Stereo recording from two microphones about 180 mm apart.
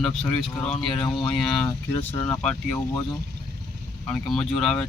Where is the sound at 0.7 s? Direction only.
25° left (ahead or behind).